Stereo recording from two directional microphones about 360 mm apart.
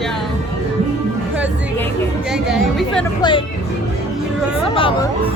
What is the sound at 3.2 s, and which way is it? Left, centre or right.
Speech, centre.